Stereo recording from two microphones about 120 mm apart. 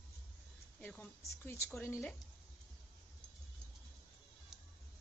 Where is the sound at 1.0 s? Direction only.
20° left (ahead or behind).